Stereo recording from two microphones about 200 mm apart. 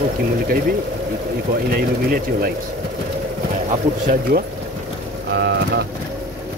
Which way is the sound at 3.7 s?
40° right (ahead or behind).